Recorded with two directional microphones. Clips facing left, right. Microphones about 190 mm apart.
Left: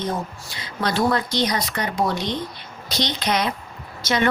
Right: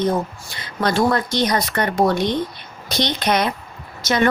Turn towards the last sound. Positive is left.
turn(degrees=-45)  # may be behind; listen again after turning